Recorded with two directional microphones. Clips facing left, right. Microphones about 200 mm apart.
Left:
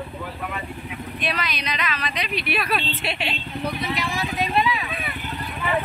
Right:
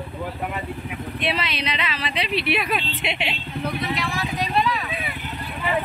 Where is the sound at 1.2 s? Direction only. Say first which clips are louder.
Right 2 dB; 25° right (ahead or behind).